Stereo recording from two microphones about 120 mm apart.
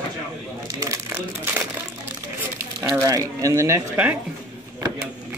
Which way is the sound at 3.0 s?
30° right (ahead or behind).